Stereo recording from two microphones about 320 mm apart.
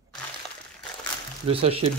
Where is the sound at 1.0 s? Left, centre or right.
Centre.